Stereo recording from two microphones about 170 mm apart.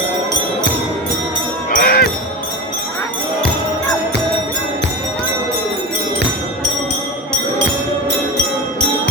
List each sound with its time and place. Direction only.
1.7 s music: 65° left (ahead or behind)